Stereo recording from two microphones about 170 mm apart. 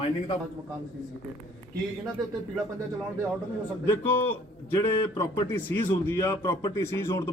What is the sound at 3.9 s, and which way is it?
A man's voice, 15° left (ahead or behind).